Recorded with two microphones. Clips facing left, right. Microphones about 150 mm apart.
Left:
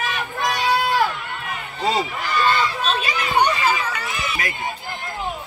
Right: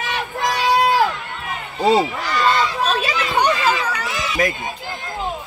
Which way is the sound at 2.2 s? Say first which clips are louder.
Right 2 dB; 90° right.